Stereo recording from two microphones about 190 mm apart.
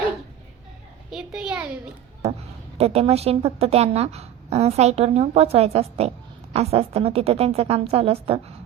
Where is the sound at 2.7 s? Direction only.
30° right (ahead or behind).